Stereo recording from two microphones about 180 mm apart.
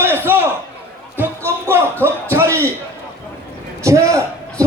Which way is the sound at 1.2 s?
10° right (ahead or behind).